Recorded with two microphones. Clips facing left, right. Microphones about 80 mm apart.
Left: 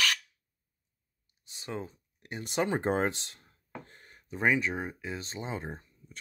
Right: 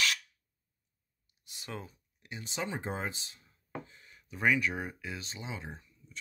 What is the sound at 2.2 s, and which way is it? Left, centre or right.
Speech, left.